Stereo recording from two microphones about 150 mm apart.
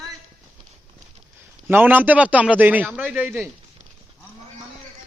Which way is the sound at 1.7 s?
15° right (ahead or behind).